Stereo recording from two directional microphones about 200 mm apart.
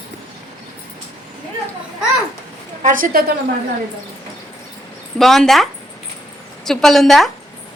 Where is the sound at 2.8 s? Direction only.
40° right (ahead or behind).